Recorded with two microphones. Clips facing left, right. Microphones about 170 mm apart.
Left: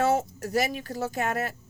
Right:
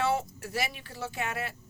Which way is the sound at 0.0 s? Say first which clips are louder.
Left 5 dB; 45° left (ahead or behind).